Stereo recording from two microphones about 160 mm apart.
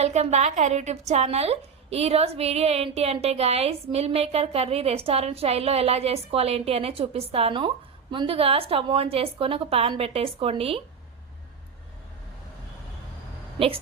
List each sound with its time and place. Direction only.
0.0 s a woman's voice: 45° right (ahead or behind)